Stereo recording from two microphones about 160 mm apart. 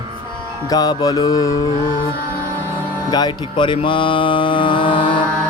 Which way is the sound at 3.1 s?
25° left (ahead or behind).